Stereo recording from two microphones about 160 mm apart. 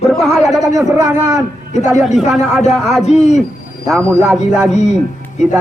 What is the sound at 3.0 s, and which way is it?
Speech, 45° left (ahead or behind).